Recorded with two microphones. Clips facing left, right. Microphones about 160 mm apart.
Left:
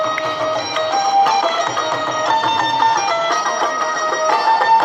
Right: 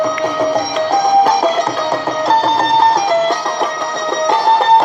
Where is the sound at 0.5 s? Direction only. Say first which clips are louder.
Right 4 dB; 40° right (ahead or behind).